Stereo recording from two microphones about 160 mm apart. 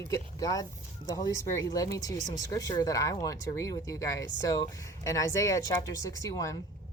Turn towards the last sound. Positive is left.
turn(degrees=20)  # may be behind; listen again after turning